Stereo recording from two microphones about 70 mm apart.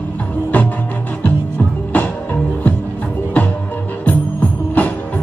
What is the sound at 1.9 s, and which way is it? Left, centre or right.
Music, left.